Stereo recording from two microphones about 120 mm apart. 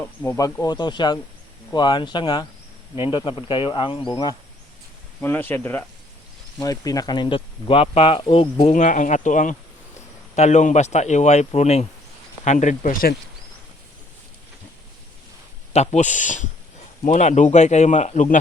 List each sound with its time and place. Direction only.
0.0 s speech: 20° left (ahead or behind)
0.3 s speech: 30° left (ahead or behind)
5.2 s speech: 15° left (ahead or behind)
6.6 s speech: 30° left (ahead or behind); by 8.2 s 50° left (ahead or behind)
8.6 s speech: 90° left
10.3 s speech: 75° left (ahead or behind)
12.5 s speech: 85° left
15.7 s speech: 65° left (ahead or behind)